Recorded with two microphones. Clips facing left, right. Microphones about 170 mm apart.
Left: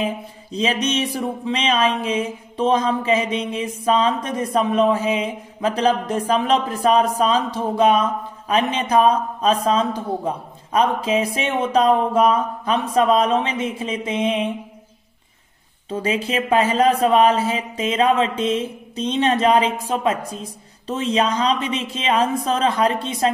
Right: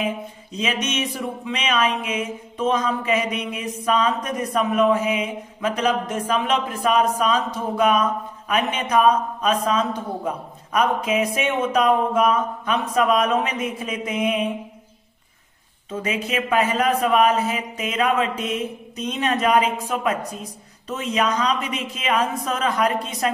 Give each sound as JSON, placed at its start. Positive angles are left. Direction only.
{"t": 0.0, "sound": "speech", "side_deg": 35}
{"t": 15.9, "sound": "a man's voice", "side_deg": 30}